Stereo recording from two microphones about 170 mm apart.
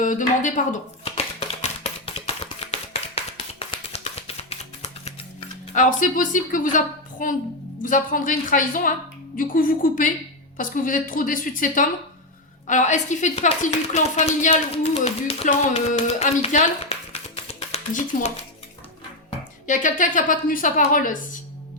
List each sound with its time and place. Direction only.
0.0 s a woman's voice: 50° left (ahead or behind)
1.0 s a sound: 40° left (ahead or behind)
5.7 s a woman's voice: 50° left (ahead or behind)
15.4 s a woman's voice: 50° left (ahead or behind)
16.0 s a sound: 40° left (ahead or behind)
19.6 s a woman's voice: 50° left (ahead or behind)